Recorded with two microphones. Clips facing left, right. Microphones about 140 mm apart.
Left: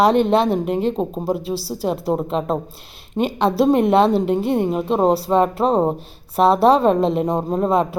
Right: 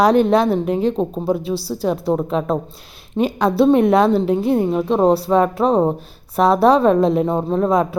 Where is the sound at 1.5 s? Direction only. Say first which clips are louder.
Right 2 dB; 35° left (ahead or behind).